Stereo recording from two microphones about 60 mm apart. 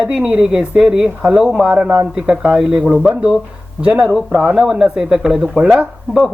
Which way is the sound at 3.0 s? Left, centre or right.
Right.